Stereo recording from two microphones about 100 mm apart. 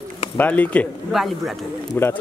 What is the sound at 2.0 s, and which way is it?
Speech, 20° left (ahead or behind).